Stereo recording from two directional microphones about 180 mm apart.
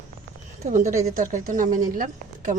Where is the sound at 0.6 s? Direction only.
40° right (ahead or behind).